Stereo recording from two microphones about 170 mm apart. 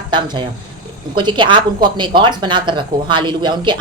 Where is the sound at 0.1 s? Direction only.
30° right (ahead or behind).